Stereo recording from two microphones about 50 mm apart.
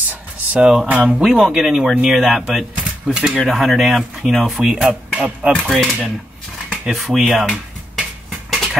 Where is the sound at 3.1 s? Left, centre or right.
Centre.